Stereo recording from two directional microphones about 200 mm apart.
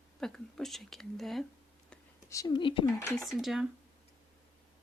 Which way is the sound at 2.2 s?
20° left (ahead or behind).